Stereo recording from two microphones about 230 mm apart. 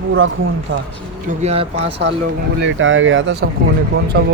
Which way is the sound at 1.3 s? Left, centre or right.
Right.